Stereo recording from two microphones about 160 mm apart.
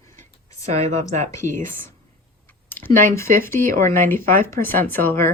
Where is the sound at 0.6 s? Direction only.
45° right (ahead or behind).